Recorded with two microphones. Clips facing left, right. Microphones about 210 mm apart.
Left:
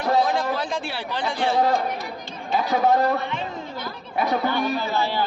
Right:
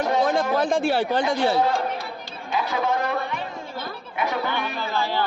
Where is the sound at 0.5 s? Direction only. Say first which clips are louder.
Right 7 dB; 50° right (ahead or behind).